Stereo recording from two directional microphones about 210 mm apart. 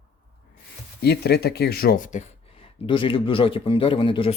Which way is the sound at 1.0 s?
50° left (ahead or behind).